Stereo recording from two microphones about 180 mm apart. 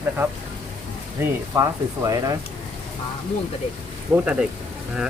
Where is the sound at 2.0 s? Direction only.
20° right (ahead or behind).